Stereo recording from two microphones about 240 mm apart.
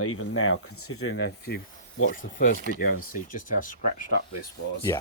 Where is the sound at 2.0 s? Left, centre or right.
Left.